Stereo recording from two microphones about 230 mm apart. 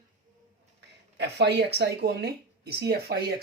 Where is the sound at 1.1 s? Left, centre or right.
Right.